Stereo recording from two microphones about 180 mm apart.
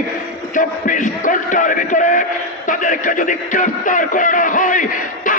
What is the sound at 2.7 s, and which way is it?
Speech, 45° left (ahead or behind).